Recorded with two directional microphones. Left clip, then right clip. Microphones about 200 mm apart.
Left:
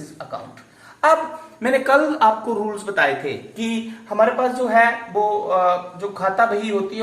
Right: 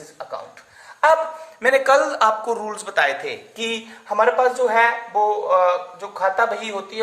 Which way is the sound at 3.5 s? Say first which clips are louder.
Right 1 dB; 50° right (ahead or behind).